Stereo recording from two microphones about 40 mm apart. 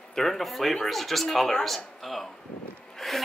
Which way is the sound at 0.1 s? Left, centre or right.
Centre.